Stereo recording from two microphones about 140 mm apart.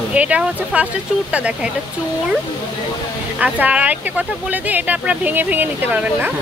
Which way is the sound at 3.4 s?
10° right (ahead or behind).